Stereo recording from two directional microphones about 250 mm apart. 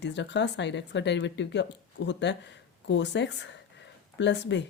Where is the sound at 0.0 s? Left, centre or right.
Left.